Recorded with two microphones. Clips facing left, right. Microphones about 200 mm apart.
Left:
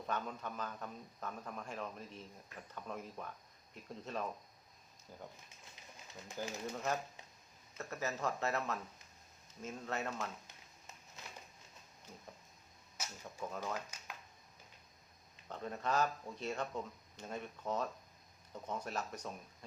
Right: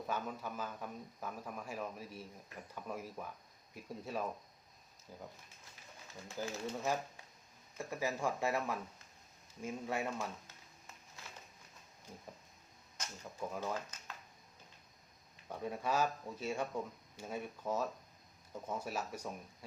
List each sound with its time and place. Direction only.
0.1 s a man's voice: 5° right (ahead or behind)
6.2 s speech: 15° left (ahead or behind)
6.7 s a man's voice: 10° right (ahead or behind)
13.0 s a sound: 5° left (ahead or behind)
13.4 s a man's voice: 10° right (ahead or behind)
13.9 s a sound: 10° left (ahead or behind)
15.4 s a man's voice: 10° right (ahead or behind)